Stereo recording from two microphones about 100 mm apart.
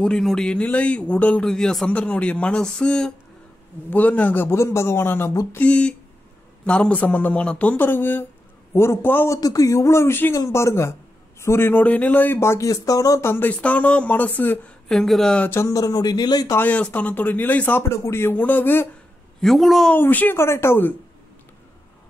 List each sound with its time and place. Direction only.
0.0 s speech: 5° left (ahead or behind)
1.5 s a man's voice: 5° left (ahead or behind); by 9.4 s 20° left (ahead or behind)
9.4 s a man's voice: 35° left (ahead or behind)
13.3 s speech: 20° left (ahead or behind)
14.9 s speech: 5° left (ahead or behind)
15.5 s speech: 35° left (ahead or behind)
16.4 s a man's voice: 20° left (ahead or behind)
19.4 s speech: centre (ahead or behind)
19.9 s a man's voice: 15° left (ahead or behind)